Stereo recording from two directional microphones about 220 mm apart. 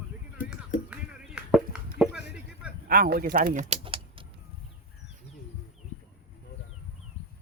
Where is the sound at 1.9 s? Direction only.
5° right (ahead or behind).